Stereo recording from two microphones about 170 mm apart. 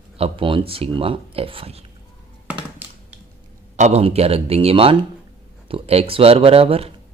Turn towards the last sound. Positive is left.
turn(degrees=-35)  # may be behind; listen again after turning